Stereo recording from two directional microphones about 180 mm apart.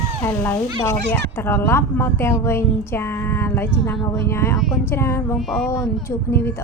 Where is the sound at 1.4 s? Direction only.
15° left (ahead or behind).